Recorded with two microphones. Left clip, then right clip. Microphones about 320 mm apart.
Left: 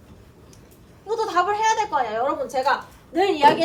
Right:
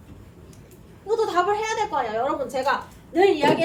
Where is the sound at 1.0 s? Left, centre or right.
Centre.